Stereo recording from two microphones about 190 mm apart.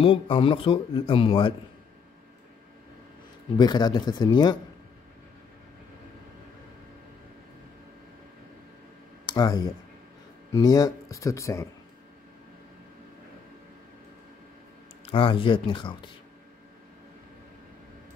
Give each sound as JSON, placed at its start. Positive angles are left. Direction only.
{"t": 0.0, "sound": "speech", "side_deg": 30}
{"t": 3.5, "sound": "speech", "side_deg": 20}
{"t": 9.2, "sound": "speech", "side_deg": 20}
{"t": 15.0, "sound": "speech", "side_deg": 25}